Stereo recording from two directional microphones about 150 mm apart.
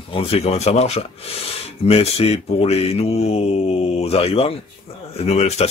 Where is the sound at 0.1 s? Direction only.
40° left (ahead or behind).